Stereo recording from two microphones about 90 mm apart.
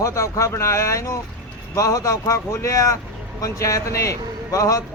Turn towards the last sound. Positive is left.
turn(degrees=40)  # may be behind; listen again after turning